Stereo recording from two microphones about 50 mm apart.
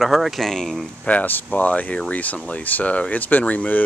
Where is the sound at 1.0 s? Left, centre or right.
Left.